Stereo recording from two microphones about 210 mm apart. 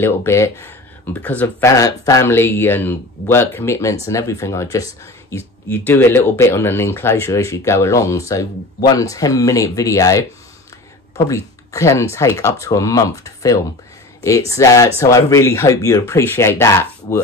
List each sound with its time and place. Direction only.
0.0 s speech: 10° left (ahead or behind)